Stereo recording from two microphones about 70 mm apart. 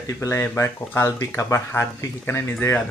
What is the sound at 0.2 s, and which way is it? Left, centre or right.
Speech, left.